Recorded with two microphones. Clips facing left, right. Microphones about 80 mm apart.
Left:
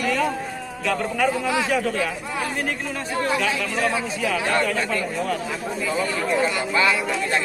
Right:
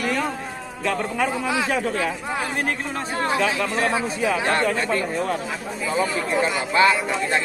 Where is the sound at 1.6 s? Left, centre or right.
Right.